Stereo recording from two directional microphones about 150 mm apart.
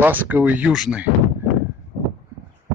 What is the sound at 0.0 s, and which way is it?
Speech, 10° right (ahead or behind).